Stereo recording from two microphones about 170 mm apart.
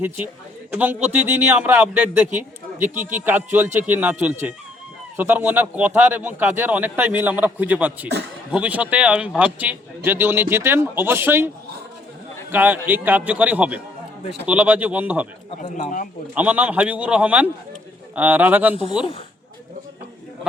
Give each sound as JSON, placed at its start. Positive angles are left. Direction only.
{"t": 0.7, "sound": "a man's voice", "side_deg": -10}
{"t": 15.4, "sound": "speech", "side_deg": 40}
{"t": 16.3, "sound": "a man's voice", "side_deg": -10}